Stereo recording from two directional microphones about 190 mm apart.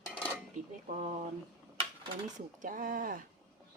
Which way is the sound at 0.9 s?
35° right (ahead or behind).